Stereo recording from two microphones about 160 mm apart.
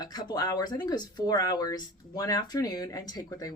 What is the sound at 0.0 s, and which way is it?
A woman's voice, 25° left (ahead or behind).